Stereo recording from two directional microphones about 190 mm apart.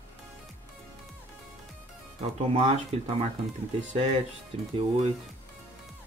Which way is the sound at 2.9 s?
35° right (ahead or behind).